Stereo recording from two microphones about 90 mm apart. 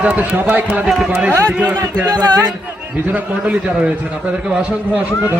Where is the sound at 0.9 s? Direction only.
5° right (ahead or behind).